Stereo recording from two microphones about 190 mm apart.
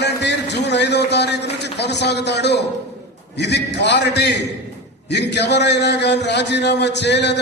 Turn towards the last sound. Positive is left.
turn(degrees=65)  # may be behind; listen again after turning